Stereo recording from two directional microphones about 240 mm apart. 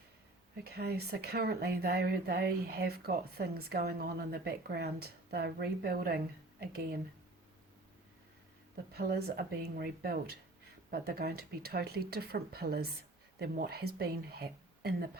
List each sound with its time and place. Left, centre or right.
0.7 s speech: right
8.9 s speech: right